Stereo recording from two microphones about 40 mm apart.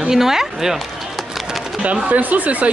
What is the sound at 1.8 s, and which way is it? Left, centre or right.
Speech, right.